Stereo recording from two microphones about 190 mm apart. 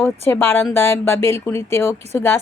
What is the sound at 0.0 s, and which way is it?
A woman's voice, 10° left (ahead or behind).